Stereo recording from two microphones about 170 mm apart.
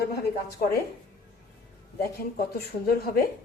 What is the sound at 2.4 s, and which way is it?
Speech, 65° left (ahead or behind).